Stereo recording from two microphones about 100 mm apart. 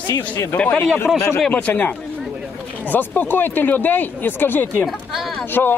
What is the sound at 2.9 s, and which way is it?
Speech, 20° left (ahead or behind).